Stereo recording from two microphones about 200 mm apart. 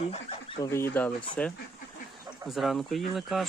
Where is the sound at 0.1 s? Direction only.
30° left (ahead or behind).